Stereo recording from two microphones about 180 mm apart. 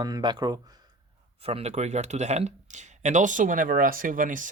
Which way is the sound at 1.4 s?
35° right (ahead or behind).